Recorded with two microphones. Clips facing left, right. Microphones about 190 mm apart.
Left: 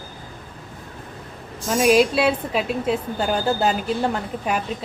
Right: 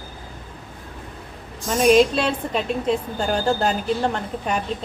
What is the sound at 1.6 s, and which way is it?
A woman's voice, 5° left (ahead or behind).